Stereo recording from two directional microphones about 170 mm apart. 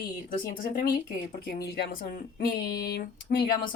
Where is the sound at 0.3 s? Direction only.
60° left (ahead or behind).